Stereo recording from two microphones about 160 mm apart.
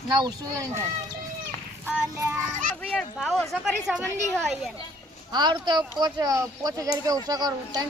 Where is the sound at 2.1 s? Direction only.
15° right (ahead or behind).